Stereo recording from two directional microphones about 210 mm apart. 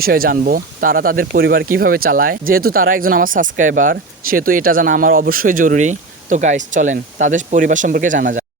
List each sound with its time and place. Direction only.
0.0 s speech: 45° right (ahead or behind)